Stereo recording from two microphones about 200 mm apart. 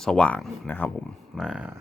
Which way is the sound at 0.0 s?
5° left (ahead or behind).